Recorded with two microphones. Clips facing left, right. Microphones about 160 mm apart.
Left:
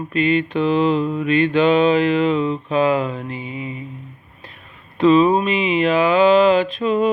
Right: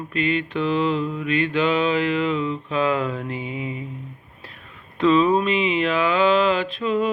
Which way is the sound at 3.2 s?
10° right (ahead or behind).